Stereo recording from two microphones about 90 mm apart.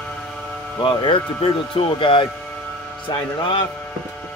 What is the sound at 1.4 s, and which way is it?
Speech, 80° left.